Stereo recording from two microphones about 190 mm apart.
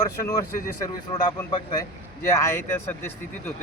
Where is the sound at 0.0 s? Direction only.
20° left (ahead or behind).